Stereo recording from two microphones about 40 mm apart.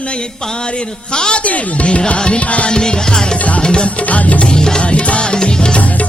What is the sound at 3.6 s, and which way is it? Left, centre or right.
Music, left.